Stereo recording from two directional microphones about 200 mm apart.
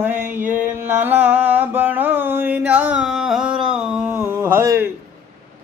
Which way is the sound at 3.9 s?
10° right (ahead or behind).